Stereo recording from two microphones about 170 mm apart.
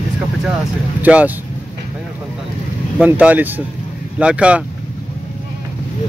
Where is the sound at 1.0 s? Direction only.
10° right (ahead or behind).